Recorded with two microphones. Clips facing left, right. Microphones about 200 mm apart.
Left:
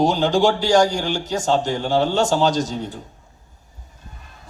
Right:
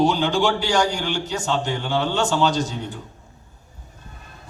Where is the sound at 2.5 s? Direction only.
60° right (ahead or behind).